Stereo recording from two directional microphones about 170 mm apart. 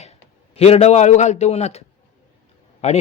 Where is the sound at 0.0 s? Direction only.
40° left (ahead or behind).